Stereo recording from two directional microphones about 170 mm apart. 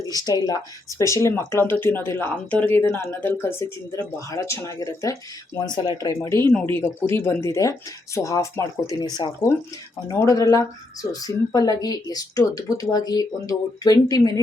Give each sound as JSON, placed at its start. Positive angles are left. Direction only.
{"t": 0.1, "sound": "speech", "side_deg": 20}